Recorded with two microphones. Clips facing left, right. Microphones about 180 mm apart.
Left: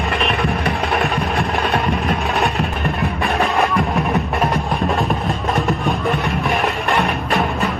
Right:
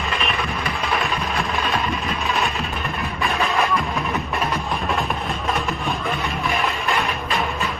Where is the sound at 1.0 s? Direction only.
60° left (ahead or behind).